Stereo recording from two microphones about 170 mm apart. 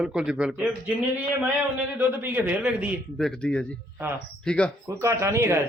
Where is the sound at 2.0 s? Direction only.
10° right (ahead or behind).